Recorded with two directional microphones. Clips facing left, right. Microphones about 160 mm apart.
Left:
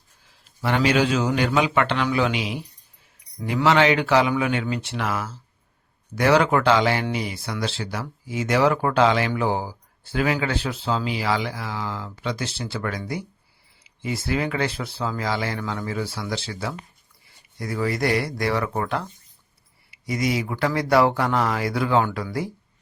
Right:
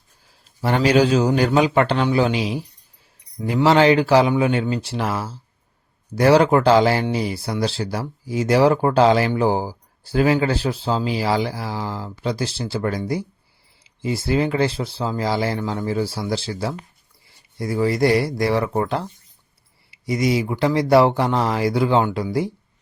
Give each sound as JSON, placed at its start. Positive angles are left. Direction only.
{"t": 0.6, "sound": "speech", "side_deg": -40}